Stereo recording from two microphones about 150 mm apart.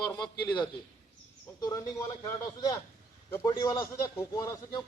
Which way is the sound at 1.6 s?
25° left (ahead or behind).